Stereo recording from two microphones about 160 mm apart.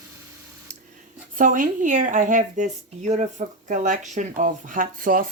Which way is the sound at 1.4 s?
55° right (ahead or behind).